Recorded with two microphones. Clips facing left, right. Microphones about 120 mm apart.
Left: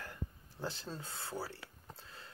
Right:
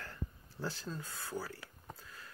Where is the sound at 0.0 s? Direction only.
15° left (ahead or behind).